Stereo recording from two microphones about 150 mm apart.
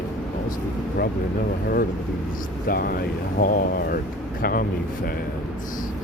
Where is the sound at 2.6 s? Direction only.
80° left.